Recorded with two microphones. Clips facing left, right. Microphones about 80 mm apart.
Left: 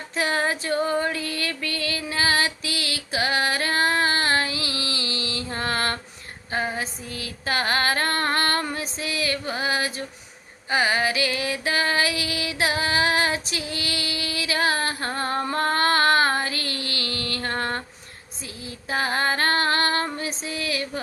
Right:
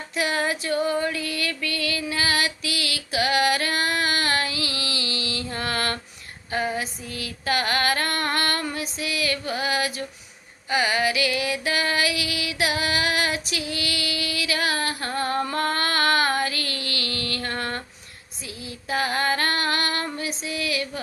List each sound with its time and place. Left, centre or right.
0.1 s female singing: left
10.7 s music: left
18.6 s female singing: left